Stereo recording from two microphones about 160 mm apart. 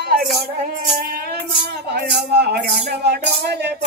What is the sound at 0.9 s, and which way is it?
Music, 70° right (ahead or behind).